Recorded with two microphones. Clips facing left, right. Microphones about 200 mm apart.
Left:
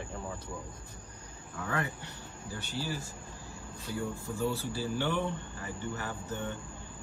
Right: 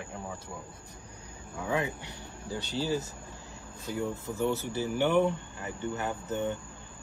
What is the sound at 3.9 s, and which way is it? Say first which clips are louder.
Speech: right 3 dB; 20° right (ahead or behind).